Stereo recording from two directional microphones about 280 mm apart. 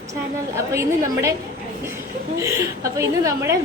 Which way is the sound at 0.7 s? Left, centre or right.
Centre.